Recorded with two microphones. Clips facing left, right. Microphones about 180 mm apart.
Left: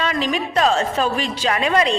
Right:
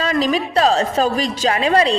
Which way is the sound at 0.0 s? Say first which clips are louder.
Right 3 dB; 35° right (ahead or behind).